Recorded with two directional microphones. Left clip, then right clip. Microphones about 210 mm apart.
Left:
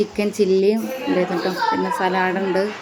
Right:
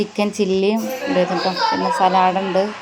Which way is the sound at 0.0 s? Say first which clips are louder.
Even; 5° right (ahead or behind).